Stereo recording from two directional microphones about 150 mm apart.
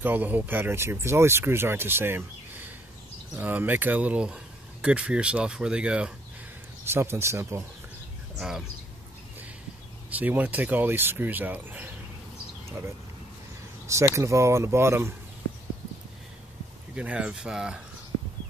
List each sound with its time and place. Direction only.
0.0 s speech: 10° right (ahead or behind)
8.4 s speech: 5° right (ahead or behind)
10.0 s speech: 10° right (ahead or behind)
13.8 s speech: 20° right (ahead or behind)
16.9 s speech: 5° right (ahead or behind)